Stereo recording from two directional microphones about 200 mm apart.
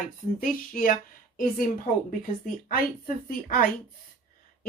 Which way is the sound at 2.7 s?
45° left (ahead or behind).